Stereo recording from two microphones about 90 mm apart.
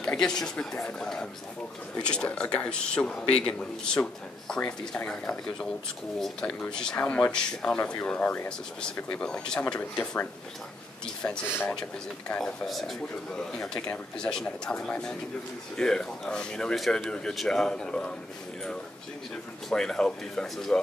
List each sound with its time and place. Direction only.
0.0 s speech: 10° left (ahead or behind)
11.4 s speech: 25° left (ahead or behind)
12.3 s speech: 10° left (ahead or behind)
19.7 s speech: 5° left (ahead or behind)